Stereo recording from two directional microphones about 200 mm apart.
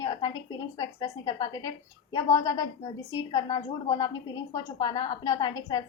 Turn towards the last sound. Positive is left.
turn(degrees=20)  # may be behind; listen again after turning